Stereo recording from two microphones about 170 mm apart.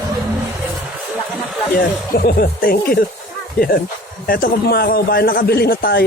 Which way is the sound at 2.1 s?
60° left (ahead or behind).